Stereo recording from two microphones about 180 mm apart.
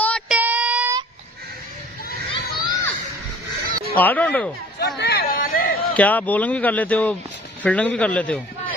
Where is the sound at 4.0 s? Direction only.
10° left (ahead or behind).